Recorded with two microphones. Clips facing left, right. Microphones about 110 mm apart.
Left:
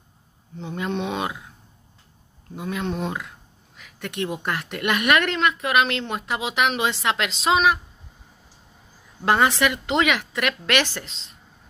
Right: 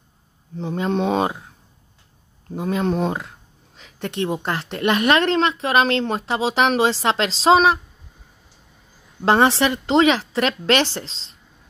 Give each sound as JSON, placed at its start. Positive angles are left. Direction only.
{"t": 0.6, "sound": "speech", "side_deg": -35}
{"t": 2.5, "sound": "speech", "side_deg": -35}
{"t": 9.2, "sound": "speech", "side_deg": -30}